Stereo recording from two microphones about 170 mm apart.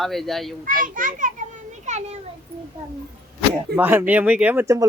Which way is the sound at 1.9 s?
40° right (ahead or behind).